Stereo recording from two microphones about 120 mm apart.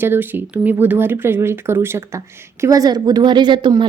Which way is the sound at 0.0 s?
15° right (ahead or behind).